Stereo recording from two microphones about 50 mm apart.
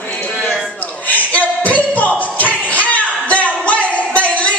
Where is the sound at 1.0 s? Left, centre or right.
Left.